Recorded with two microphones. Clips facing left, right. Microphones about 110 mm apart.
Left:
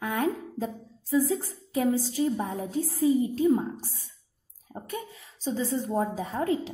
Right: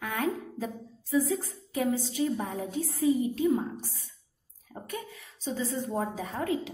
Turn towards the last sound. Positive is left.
turn(degrees=30)  # may be behind; listen again after turning